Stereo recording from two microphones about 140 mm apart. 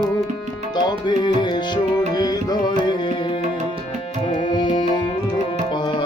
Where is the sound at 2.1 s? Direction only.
30° left (ahead or behind).